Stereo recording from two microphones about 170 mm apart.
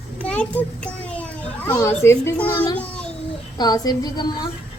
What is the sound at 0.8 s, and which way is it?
Children playing, 5° left (ahead or behind).